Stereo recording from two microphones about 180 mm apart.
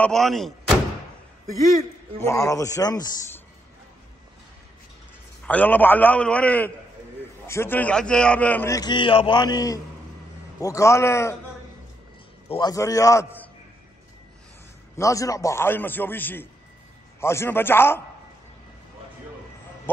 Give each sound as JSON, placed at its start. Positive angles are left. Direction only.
{"t": 0.0, "sound": "speech", "side_deg": 0}
{"t": 2.1, "sound": "a man's voice", "side_deg": 15}
{"t": 5.4, "sound": "a man's voice", "side_deg": 10}
{"t": 12.4, "sound": "a man's voice", "side_deg": 25}
{"t": 15.0, "sound": "a man's voice", "side_deg": 15}